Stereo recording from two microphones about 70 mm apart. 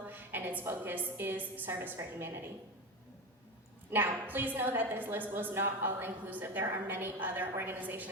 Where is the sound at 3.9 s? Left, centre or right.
Right.